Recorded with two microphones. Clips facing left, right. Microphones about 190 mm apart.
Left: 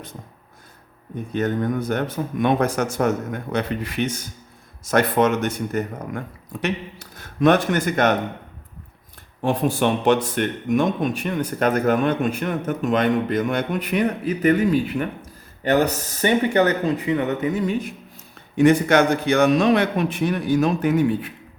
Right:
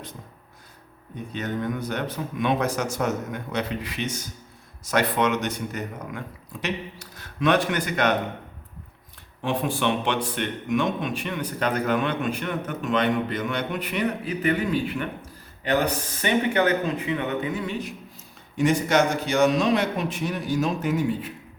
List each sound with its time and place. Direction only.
1.3 s speech: 50° left (ahead or behind)
9.4 s speech: 40° left (ahead or behind)
16.2 s speech: 40° left (ahead or behind)
18.5 s a man's voice: 60° left (ahead or behind)